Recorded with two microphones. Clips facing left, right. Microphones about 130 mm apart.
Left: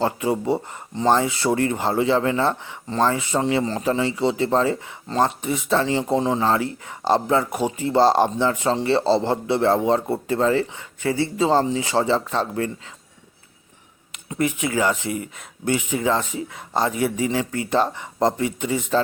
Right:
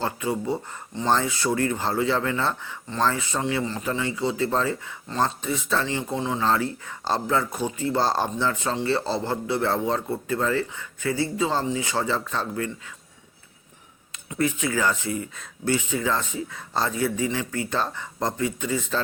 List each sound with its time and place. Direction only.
0.0 s a man's voice: 25° left (ahead or behind)
3.4 s a man's voice: 35° left (ahead or behind)
6.4 s a man's voice: 20° left (ahead or behind)
14.1 s a man's voice: 20° left (ahead or behind)